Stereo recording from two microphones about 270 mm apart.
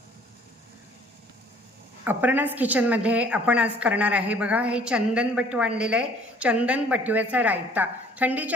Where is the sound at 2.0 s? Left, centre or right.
Centre.